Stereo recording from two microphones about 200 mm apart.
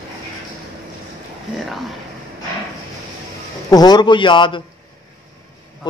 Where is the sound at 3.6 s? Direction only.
20° left (ahead or behind).